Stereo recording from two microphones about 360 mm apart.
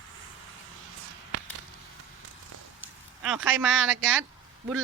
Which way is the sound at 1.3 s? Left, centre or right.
Right.